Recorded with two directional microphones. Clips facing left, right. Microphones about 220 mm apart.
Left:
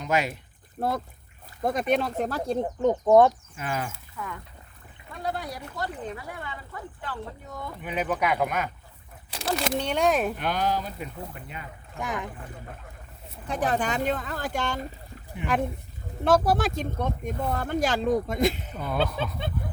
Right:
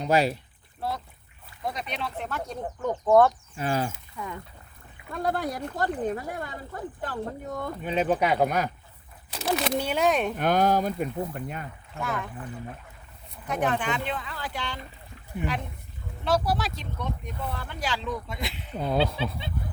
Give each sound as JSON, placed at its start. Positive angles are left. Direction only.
{"t": 0.0, "sound": "speech", "side_deg": -35}
{"t": 0.8, "sound": "speech", "side_deg": 50}
{"t": 3.5, "sound": "speech", "side_deg": -35}
{"t": 3.9, "sound": "speech", "side_deg": -20}
{"t": 5.1, "sound": "speech", "side_deg": -50}
{"t": 7.8, "sound": "speech", "side_deg": -25}
{"t": 9.3, "sound": "speech", "side_deg": 0}
{"t": 10.3, "sound": "speech", "side_deg": -50}
{"t": 11.9, "sound": "speech", "side_deg": 15}
{"t": 13.5, "sound": "speech", "side_deg": 35}
{"t": 16.2, "sound": "speech", "side_deg": 50}